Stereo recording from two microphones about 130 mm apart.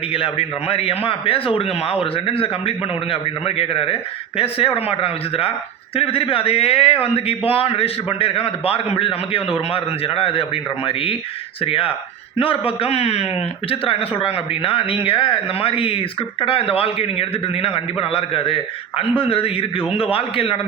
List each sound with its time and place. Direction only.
0.1 s a man's voice: 50° left (ahead or behind)